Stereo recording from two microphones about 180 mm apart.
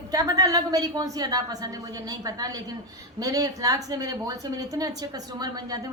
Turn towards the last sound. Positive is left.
turn(degrees=-20)  # may be behind; listen again after turning